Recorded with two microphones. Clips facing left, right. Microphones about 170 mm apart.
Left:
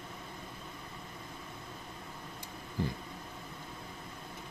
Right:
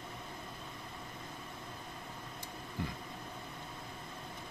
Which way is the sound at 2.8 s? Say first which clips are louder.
Left 5 dB; 35° left (ahead or behind).